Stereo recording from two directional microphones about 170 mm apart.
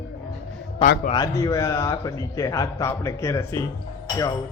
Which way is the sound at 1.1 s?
20° left (ahead or behind).